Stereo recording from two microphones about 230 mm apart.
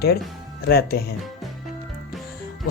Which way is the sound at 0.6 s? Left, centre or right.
Left.